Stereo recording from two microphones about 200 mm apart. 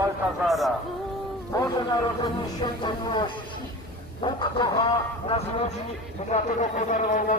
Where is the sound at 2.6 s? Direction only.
20° left (ahead or behind).